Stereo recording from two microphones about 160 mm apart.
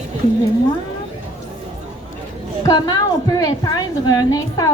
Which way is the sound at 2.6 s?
25° left (ahead or behind).